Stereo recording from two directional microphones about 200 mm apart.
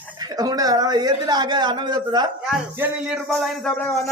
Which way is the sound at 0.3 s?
20° right (ahead or behind).